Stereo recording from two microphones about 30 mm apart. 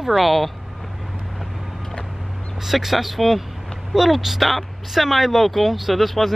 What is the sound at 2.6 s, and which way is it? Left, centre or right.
Speech, centre.